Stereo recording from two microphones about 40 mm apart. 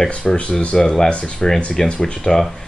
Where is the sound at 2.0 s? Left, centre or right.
Centre.